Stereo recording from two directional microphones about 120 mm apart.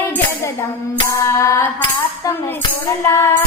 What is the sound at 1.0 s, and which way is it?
Music, 25° left (ahead or behind).